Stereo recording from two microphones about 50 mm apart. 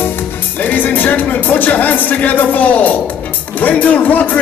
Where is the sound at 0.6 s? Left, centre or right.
Left.